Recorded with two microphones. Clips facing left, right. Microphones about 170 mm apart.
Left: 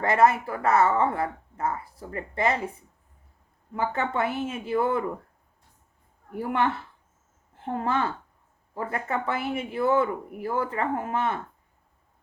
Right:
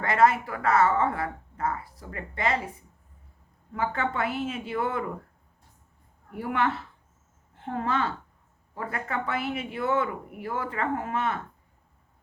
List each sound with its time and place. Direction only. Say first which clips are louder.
0.0 s speech: left 1 dB; 25° left (ahead or behind)
3.8 s speech: left 2 dB; 30° left (ahead or behind)
6.3 s a woman's voice: left 1 dB; 30° left (ahead or behind)